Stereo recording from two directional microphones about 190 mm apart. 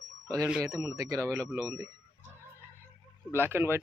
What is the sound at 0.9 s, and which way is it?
Speech, 15° right (ahead or behind).